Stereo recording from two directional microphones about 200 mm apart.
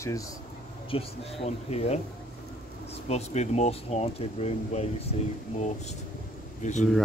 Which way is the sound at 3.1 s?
35° left (ahead or behind).